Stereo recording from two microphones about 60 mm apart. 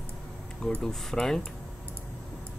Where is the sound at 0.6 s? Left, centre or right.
Centre.